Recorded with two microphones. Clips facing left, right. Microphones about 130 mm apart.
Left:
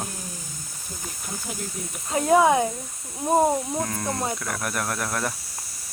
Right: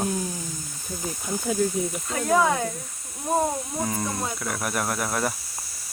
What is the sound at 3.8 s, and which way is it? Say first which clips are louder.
Speech: left 1 dB; 5° right (ahead or behind).